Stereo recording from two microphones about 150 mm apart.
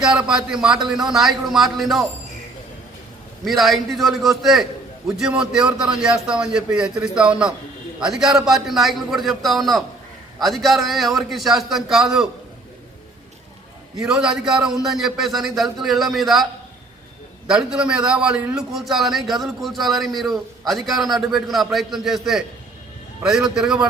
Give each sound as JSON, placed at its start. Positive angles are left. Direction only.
{"t": 0.0, "sound": "a man's voice", "side_deg": -5}
{"t": 3.4, "sound": "a man's voice", "side_deg": 0}
{"t": 13.9, "sound": "a man's voice", "side_deg": -5}
{"t": 17.5, "sound": "a man's voice", "side_deg": -5}